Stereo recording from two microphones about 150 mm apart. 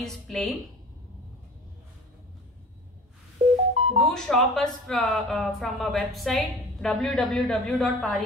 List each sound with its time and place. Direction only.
0.0 s speech: 5° left (ahead or behind)
3.7 s music: 45° right (ahead or behind)
4.1 s speech: 5° left (ahead or behind)